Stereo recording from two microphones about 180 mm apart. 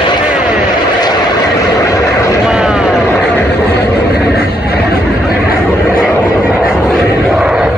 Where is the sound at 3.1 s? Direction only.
10° left (ahead or behind).